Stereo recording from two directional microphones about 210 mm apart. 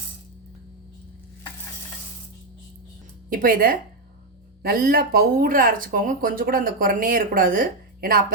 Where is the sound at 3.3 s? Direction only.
40° right (ahead or behind).